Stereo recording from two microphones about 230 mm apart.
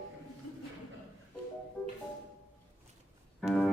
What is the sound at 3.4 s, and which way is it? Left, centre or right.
Organ, centre.